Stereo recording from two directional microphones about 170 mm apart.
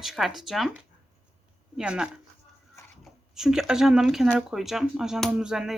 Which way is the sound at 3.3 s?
5° right (ahead or behind).